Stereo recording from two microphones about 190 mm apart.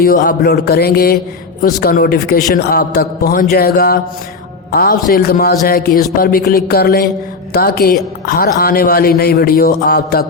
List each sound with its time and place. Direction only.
0.0 s a man's voice: 50° left (ahead or behind)